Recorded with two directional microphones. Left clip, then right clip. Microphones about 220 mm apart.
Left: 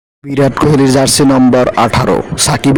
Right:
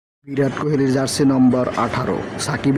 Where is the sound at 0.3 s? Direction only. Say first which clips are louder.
Left 10 dB; 50° left (ahead or behind).